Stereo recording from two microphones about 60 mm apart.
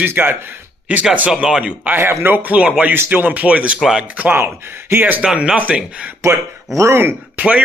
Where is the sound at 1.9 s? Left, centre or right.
Right.